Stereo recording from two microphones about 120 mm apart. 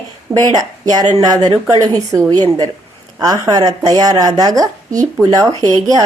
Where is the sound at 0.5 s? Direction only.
35° right (ahead or behind).